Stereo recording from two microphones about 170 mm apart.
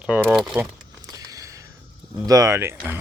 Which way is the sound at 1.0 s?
20° right (ahead or behind).